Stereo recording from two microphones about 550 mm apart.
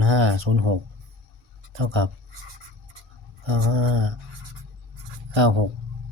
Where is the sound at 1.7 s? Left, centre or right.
Right.